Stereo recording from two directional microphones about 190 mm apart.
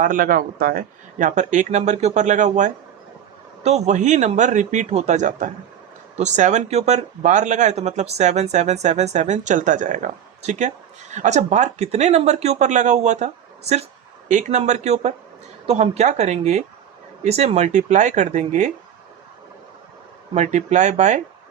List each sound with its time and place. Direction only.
0.0 s speech: 45° right (ahead or behind)
20.3 s speech: 35° right (ahead or behind)